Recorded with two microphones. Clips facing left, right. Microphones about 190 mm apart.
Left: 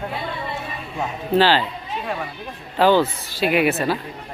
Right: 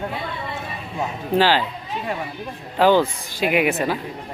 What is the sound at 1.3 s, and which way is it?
Speech, 10° right (ahead or behind).